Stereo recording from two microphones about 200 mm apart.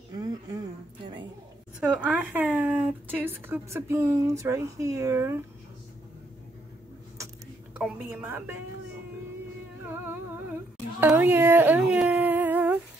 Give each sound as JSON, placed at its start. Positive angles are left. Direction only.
{"t": 0.1, "sound": "a sound", "side_deg": -20}
{"t": 1.8, "sound": "a woman's voice", "side_deg": -5}
{"t": 7.7, "sound": "a woman's voice", "side_deg": -5}
{"t": 9.8, "sound": "humming", "side_deg": -10}